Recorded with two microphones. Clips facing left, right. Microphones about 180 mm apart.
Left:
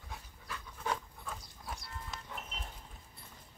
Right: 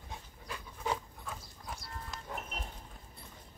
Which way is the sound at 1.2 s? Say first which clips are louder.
Even; centre (ahead or behind).